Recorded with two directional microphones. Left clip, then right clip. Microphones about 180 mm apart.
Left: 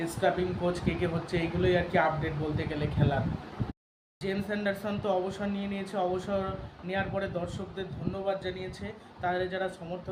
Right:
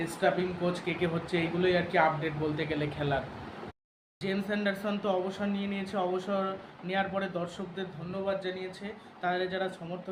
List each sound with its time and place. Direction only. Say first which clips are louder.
0.0 s speech: even; 5° left (ahead or behind)
4.2 s speech: even; 5° left (ahead or behind)